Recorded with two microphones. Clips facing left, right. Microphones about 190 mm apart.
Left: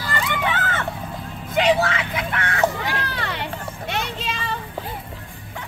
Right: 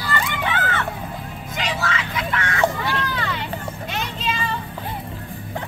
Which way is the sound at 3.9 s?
65° left (ahead or behind).